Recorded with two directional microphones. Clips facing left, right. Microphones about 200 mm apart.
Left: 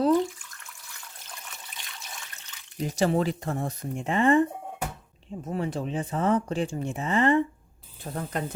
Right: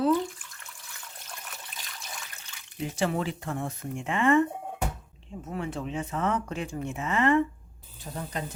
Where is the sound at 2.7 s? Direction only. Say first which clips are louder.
Left 4 dB; 40° left (ahead or behind).